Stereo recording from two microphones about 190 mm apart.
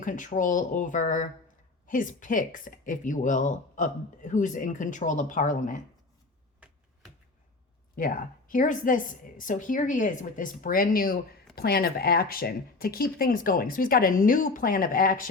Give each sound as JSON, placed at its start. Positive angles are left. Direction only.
{"t": 0.0, "sound": "speech", "side_deg": 45}
{"t": 7.9, "sound": "speech", "side_deg": 45}